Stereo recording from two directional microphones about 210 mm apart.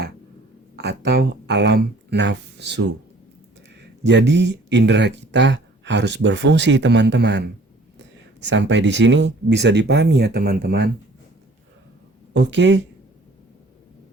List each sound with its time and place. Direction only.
0.8 s speech: 50° right (ahead or behind)
4.0 s speech: 55° right (ahead or behind)
8.4 s speech: 60° right (ahead or behind)
12.3 s speech: 55° right (ahead or behind)